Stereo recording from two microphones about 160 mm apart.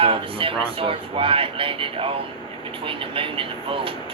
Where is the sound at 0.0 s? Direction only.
35° right (ahead or behind).